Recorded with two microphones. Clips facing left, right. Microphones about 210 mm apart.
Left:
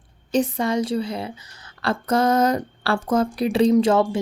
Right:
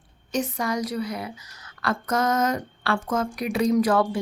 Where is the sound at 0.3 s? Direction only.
30° left (ahead or behind).